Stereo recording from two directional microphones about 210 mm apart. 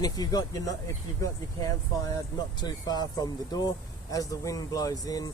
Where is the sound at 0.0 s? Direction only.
20° left (ahead or behind).